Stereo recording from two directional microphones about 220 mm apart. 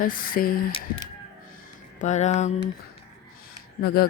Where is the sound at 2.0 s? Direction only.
30° left (ahead or behind).